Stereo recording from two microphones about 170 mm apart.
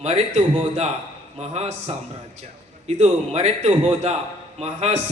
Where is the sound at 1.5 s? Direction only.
40° right (ahead or behind).